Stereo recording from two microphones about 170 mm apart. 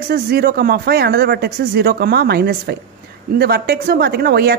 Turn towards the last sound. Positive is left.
turn(degrees=-70)  # may be behind; listen again after turning